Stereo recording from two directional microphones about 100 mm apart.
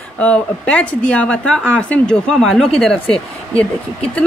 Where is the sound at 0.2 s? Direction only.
10° left (ahead or behind).